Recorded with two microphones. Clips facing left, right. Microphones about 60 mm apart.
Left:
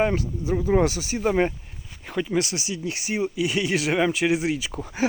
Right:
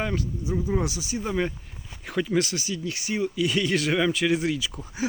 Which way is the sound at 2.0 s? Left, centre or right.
Centre.